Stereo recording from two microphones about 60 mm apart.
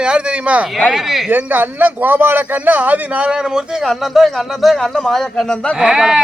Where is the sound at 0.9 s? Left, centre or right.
Centre.